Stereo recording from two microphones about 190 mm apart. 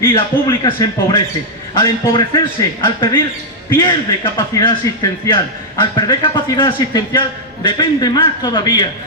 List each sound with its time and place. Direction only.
0.0 s a man's voice: 20° left (ahead or behind)